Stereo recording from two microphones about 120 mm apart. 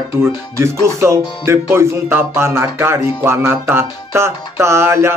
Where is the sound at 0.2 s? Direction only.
25° right (ahead or behind).